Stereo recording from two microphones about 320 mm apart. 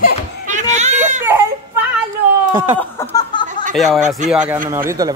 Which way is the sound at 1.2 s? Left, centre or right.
Centre.